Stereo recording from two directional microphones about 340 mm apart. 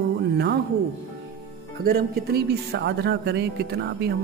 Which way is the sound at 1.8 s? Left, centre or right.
Right.